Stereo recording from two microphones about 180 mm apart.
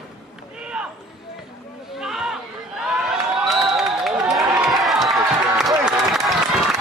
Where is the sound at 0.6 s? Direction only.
5° right (ahead or behind).